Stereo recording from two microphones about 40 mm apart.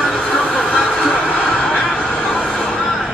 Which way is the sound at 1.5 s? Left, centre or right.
Centre.